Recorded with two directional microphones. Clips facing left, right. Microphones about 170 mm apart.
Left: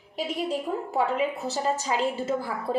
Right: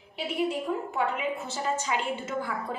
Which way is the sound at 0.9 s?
35° left (ahead or behind).